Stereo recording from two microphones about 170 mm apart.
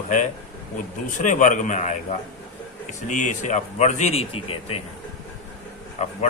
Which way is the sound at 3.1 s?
45° left (ahead or behind).